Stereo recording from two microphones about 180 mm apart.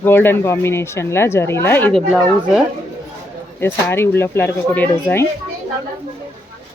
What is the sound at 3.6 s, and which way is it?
Speech, 10° left (ahead or behind).